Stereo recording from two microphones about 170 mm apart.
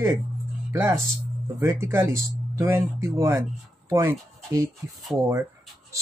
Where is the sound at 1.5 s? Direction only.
20° right (ahead or behind).